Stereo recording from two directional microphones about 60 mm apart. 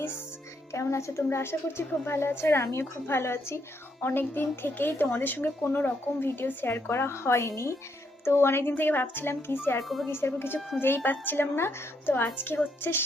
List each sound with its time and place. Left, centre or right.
0.7 s a woman's voice: left
4.0 s speech: left
9.8 s a woman's voice: centre
10.1 s speech: left